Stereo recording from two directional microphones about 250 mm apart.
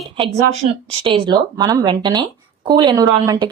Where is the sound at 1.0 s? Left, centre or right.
Right.